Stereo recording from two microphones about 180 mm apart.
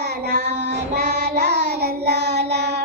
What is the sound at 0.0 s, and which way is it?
Child singing, 70° right (ahead or behind).